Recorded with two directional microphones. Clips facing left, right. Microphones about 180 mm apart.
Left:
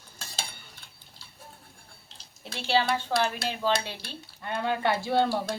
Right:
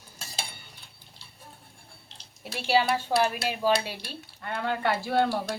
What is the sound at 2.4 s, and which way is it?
Speech, 10° right (ahead or behind).